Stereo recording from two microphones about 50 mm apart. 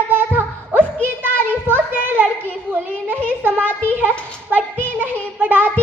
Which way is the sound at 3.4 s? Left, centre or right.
Right.